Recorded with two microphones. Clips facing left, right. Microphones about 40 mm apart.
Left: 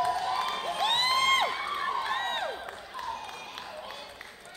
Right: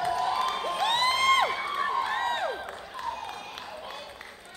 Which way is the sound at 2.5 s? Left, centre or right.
Centre.